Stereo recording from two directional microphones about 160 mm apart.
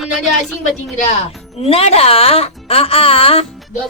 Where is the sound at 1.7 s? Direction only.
40° left (ahead or behind).